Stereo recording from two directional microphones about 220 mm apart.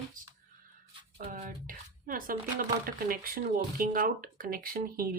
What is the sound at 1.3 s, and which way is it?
Speech, 35° right (ahead or behind).